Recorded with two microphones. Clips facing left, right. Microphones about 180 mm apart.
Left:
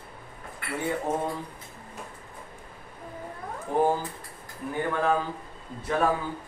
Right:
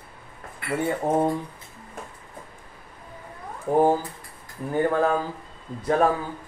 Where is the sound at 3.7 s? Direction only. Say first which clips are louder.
Right 5 dB; 45° right (ahead or behind).